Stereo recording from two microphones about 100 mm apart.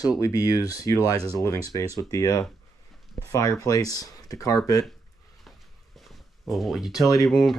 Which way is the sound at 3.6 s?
40° left (ahead or behind).